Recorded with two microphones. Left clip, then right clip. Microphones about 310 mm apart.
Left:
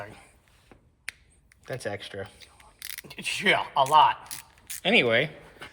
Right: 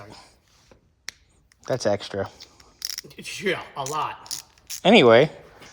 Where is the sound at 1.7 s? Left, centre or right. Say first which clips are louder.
Right 10 dB; centre.